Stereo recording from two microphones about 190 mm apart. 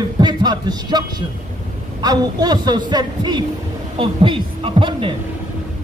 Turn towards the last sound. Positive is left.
turn(degrees=-30)  # may be behind; listen again after turning